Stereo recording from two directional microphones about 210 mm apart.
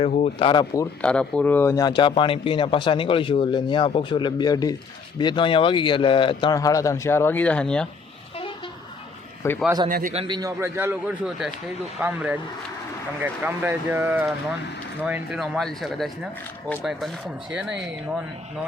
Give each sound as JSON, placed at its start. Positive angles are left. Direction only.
{"t": 0.0, "sound": "speech", "side_deg": 30}
{"t": 1.0, "sound": "a man's voice", "side_deg": 5}
{"t": 9.6, "sound": "speech", "side_deg": -20}
{"t": 9.9, "sound": "a man's voice", "side_deg": -35}